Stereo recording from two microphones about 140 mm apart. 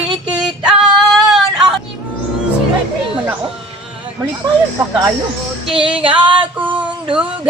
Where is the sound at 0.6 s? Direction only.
5° right (ahead or behind).